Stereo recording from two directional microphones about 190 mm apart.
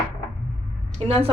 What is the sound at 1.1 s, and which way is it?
Speech, 35° right (ahead or behind).